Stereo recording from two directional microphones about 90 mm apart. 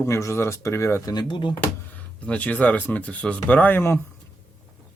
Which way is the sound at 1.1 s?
65° left (ahead or behind).